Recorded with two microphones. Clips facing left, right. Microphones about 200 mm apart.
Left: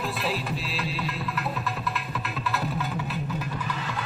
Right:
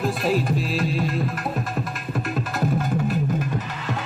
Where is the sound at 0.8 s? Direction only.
45° right (ahead or behind).